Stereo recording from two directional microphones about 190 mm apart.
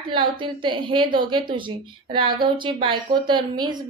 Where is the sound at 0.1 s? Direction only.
25° right (ahead or behind).